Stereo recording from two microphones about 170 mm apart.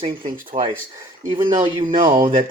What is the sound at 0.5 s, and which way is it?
Speech, 40° right (ahead or behind).